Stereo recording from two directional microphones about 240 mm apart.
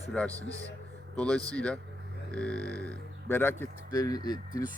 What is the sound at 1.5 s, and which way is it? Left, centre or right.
Speech, centre.